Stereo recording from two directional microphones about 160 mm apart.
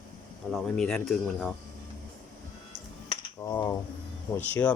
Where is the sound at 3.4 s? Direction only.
15° left (ahead or behind).